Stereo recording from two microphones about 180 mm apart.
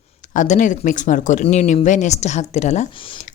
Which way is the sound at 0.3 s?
45° left (ahead or behind).